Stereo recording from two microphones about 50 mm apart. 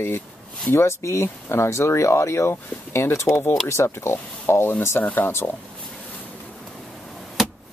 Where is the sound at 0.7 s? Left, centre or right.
Left.